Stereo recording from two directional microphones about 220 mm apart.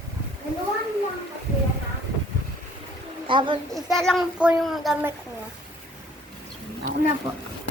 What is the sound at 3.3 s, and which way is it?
Speech, 20° right (ahead or behind).